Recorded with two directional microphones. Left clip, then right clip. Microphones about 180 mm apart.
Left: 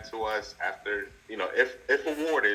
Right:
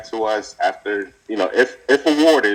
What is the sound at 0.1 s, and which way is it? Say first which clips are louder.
A man's voice: right 10 dB; 35° right (ahead or behind).